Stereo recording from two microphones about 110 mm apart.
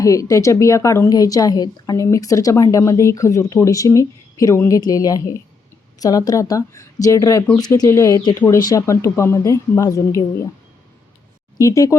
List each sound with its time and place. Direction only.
0.0 s a woman's voice: 30° left (ahead or behind)
11.5 s a woman's voice: 30° left (ahead or behind)